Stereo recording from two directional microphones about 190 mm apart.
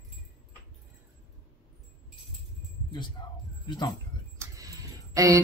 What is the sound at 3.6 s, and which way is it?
Speech, 20° left (ahead or behind).